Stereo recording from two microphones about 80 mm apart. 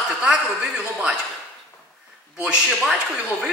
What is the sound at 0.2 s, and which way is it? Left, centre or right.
A man's voice, centre.